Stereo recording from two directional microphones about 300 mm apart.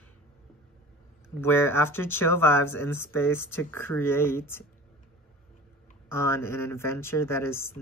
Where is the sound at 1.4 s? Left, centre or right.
Centre.